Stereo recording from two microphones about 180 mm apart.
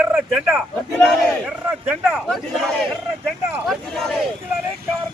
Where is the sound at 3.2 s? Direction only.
Centre (ahead or behind).